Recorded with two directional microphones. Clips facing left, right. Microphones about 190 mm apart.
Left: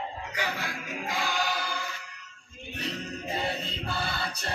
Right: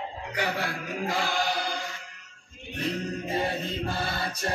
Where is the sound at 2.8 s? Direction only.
50° right (ahead or behind).